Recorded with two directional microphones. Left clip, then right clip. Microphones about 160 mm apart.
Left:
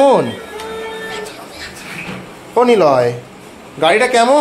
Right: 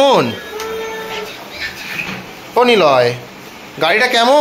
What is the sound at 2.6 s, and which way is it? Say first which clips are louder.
A man's voice: even; 10° left (ahead or behind).